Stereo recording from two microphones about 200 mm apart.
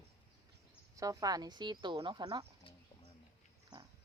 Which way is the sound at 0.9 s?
15° right (ahead or behind).